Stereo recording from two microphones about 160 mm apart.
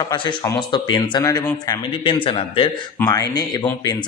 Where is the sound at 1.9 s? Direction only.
35° left (ahead or behind).